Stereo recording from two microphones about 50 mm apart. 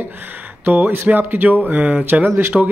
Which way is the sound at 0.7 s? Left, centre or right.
Right.